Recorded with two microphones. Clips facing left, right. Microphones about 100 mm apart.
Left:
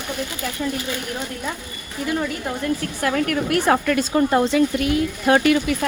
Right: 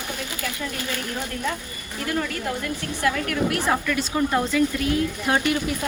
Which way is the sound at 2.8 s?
45° left (ahead or behind).